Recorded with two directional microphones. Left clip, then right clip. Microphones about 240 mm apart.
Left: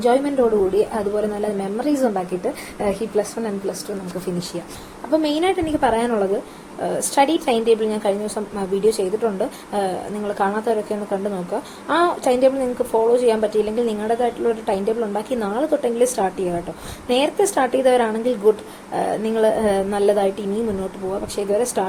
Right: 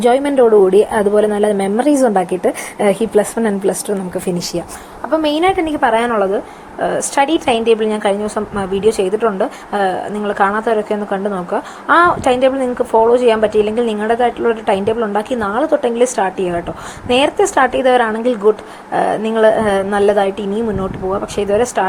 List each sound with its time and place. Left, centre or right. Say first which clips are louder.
0.0 s a woman's voice: right 6 dB; right
5.1 s speech: right 5 dB; centre